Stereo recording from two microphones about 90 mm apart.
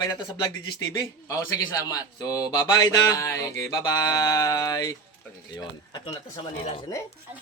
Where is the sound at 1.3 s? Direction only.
40° left (ahead or behind).